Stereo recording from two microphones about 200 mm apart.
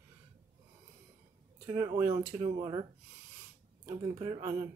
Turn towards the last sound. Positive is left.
turn(degrees=-25)  # may be behind; listen again after turning